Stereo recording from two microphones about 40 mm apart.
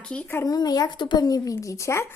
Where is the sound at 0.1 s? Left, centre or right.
Left.